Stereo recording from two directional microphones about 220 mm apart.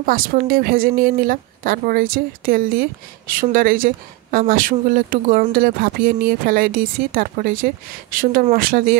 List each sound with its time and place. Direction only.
0.0 s speech: 40° right (ahead or behind)